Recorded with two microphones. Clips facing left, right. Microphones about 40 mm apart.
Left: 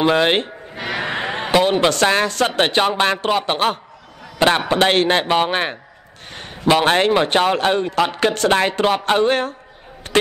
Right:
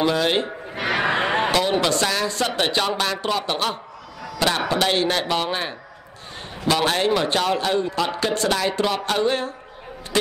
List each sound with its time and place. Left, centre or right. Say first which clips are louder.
0.0 s a man's voice: left 4 dB; left
0.7 s neigh: right 2 dB; right
1.5 s speech: left 5 dB; left
1.9 s a man's voice: left 5 dB; left
6.3 s a sound: left 4 dB; left
6.7 s a man's voice: left 5 dB; left